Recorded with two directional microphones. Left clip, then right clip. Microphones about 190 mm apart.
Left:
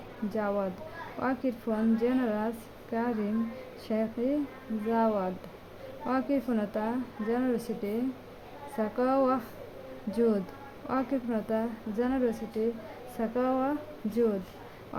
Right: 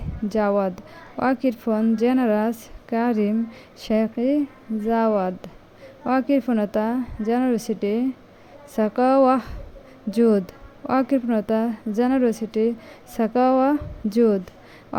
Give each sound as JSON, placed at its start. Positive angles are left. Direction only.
{"t": 0.3, "sound": "a woman's voice", "side_deg": -30}